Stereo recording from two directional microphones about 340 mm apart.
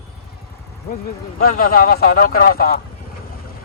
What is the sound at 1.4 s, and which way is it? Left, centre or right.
Speech, left.